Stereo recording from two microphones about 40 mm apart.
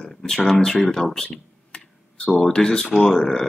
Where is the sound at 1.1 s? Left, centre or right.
Centre.